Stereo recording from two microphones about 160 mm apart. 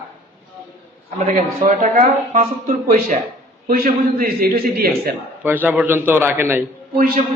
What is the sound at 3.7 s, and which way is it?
A man's voice, 65° right (ahead or behind).